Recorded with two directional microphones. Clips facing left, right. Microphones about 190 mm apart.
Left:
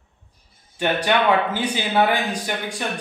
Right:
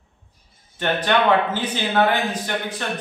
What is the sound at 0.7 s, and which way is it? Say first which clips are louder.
A man's voice: even; 10° left (ahead or behind).